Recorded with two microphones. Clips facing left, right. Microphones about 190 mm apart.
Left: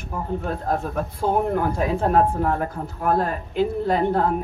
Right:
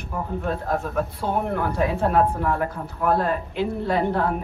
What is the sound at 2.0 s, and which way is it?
A woman's voice, 40° left (ahead or behind).